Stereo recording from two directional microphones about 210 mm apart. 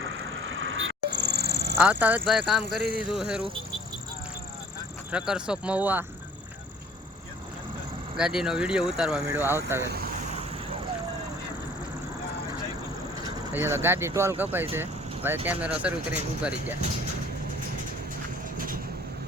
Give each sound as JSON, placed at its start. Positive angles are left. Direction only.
{"t": 0.0, "sound": "a sound", "side_deg": -65}
{"t": 1.8, "sound": "speech", "side_deg": -5}
{"t": 5.1, "sound": "speech", "side_deg": -5}
{"t": 8.1, "sound": "speech", "side_deg": -5}
{"t": 13.5, "sound": "speech", "side_deg": -10}
{"t": 18.5, "sound": "vehicle", "side_deg": -40}